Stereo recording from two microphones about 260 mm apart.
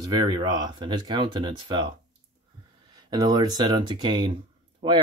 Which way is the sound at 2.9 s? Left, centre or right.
Centre.